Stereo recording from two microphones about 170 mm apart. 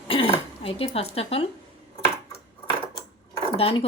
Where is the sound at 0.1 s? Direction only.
35° left (ahead or behind).